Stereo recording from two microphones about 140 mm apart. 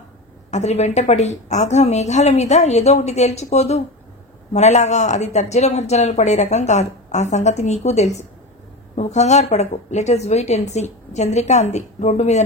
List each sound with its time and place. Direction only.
0.5 s speech: 55° left (ahead or behind)